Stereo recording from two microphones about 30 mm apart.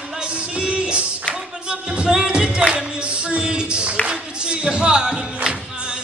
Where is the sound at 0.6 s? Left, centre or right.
Right.